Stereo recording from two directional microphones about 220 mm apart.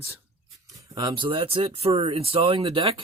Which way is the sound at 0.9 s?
20° right (ahead or behind).